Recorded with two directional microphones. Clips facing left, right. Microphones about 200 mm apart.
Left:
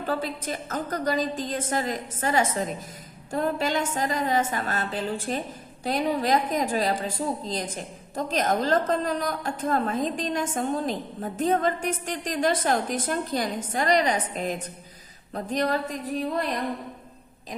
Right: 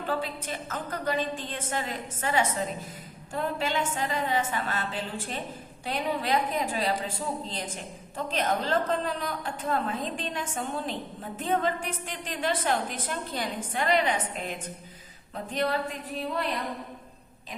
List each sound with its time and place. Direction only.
0.1 s a woman's voice: 40° left (ahead or behind)
15.5 s a woman's voice: 40° left (ahead or behind)